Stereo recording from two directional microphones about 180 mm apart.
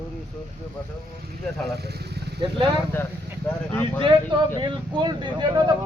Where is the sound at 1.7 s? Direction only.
60° right (ahead or behind).